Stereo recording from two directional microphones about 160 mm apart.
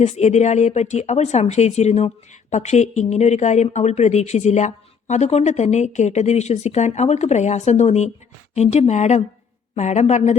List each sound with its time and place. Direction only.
0.0 s speech: 45° left (ahead or behind)